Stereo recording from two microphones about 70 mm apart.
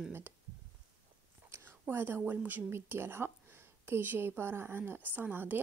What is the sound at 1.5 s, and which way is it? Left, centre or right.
Speech, right.